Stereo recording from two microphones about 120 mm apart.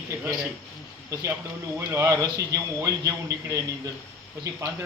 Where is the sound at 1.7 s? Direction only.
20° right (ahead or behind).